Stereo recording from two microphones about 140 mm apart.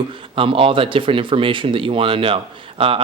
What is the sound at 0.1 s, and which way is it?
Speech, 40° right (ahead or behind).